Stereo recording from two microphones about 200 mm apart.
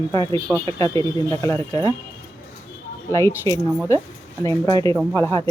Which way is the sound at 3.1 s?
15° left (ahead or behind).